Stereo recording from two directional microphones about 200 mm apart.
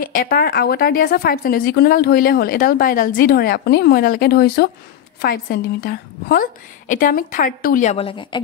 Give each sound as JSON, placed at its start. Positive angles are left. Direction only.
{"t": 0.0, "sound": "speech", "side_deg": 45}